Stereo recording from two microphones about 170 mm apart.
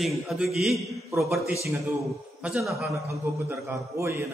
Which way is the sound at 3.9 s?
15° right (ahead or behind).